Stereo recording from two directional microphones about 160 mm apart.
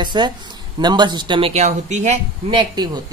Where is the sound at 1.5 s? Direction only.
45° right (ahead or behind).